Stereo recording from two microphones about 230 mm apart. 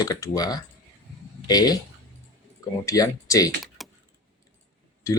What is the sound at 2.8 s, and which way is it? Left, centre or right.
Speech, centre.